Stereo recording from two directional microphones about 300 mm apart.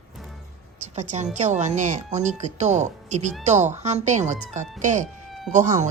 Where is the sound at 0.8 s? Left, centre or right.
Right.